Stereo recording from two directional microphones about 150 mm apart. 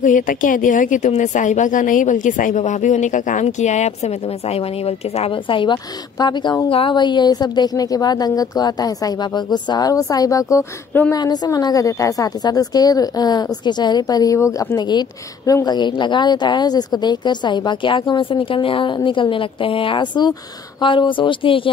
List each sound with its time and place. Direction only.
0.0 s a woman's voice: 60° left (ahead or behind); by 11.1 s 15° left (ahead or behind)
11.1 s a woman's voice: 25° left (ahead or behind)